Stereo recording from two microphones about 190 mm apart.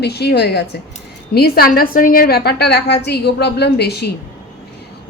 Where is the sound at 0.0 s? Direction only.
60° left (ahead or behind).